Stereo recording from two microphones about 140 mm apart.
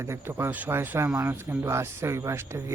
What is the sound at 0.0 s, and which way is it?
Speech, 20° right (ahead or behind).